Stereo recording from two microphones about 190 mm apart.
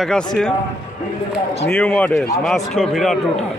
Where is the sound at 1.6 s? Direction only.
5° left (ahead or behind).